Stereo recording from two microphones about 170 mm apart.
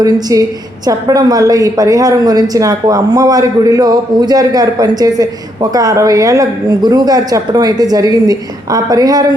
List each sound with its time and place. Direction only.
0.0 s a woman's voice: 20° right (ahead or behind)